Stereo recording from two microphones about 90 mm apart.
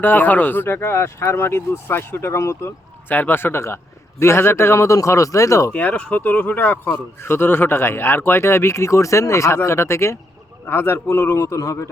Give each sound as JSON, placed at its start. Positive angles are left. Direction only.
{"t": 0.0, "sound": "a man's voice", "side_deg": 20}
{"t": 5.7, "sound": "a man's voice", "side_deg": 15}